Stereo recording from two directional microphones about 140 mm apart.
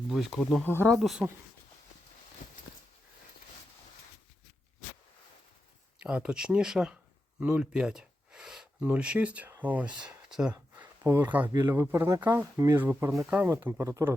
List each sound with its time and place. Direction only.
0.1 s speech: centre (ahead or behind)
0.6 s speech: 15° left (ahead or behind)
0.9 s speech: centre (ahead or behind)
6.0 s speech: 10° right (ahead or behind)
10.5 s speech: 15° right (ahead or behind)